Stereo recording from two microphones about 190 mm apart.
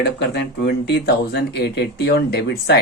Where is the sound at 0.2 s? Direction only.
60° left (ahead or behind).